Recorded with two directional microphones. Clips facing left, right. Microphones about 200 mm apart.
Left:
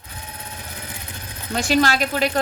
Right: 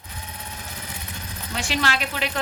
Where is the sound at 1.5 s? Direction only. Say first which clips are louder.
Left 7 dB; 40° left (ahead or behind).